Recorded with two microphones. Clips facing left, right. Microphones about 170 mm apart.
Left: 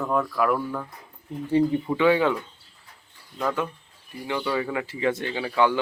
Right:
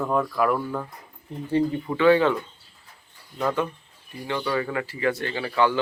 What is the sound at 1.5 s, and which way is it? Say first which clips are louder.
Speech: left 2 dB; 15° left (ahead or behind).